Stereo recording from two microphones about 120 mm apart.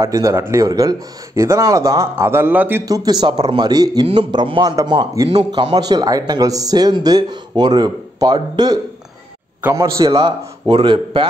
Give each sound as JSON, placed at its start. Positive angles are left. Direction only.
{"t": 0.0, "sound": "speech", "side_deg": -25}
{"t": 2.8, "sound": "speech", "side_deg": -30}
{"t": 5.4, "sound": "speech", "side_deg": -40}
{"t": 9.6, "sound": "speech", "side_deg": -20}
{"t": 10.0, "sound": "speech", "side_deg": -45}